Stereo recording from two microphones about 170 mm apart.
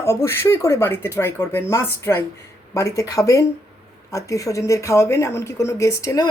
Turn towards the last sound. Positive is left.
turn(degrees=20)  # may be behind; listen again after turning